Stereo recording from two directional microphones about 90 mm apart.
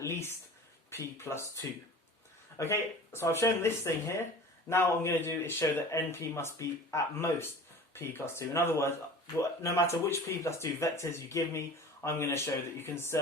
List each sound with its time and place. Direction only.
0.0 s a man's voice: 30° left (ahead or behind)